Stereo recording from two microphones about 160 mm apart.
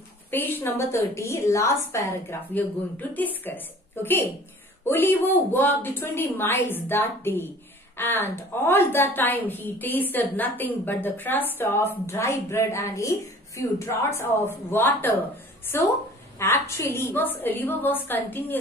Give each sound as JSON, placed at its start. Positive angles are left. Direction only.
{"t": 0.3, "sound": "a woman's voice", "side_deg": 10}
{"t": 16.3, "sound": "a woman's voice", "side_deg": 15}